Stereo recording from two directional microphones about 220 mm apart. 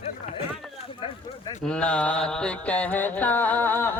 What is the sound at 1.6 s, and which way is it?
Mantra, 5° left (ahead or behind).